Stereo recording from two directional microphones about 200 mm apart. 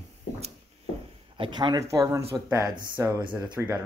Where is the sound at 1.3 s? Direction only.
25° right (ahead or behind).